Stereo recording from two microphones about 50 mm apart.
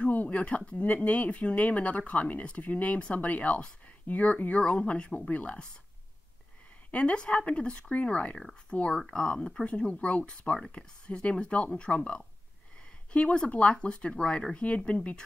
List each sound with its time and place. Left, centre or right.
0.1 s speech: left
6.9 s speech: left
8.4 s speech: centre; by 15.2 s left